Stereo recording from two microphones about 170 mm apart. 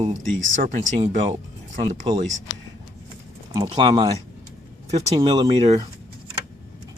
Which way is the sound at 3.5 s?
25° right (ahead or behind).